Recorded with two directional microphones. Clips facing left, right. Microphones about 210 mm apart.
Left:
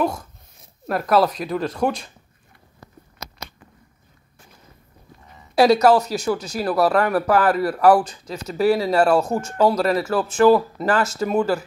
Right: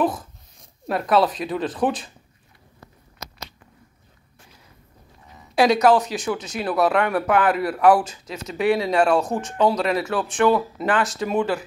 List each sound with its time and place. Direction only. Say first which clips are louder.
0.0 s speech: even; centre (ahead or behind)
5.5 s speech: left 2 dB; 15° right (ahead or behind)
6.6 s speech: left 1 dB; centre (ahead or behind)